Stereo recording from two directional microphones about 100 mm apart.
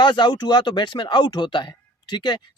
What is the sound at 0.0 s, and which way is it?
Speech, 50° left (ahead or behind).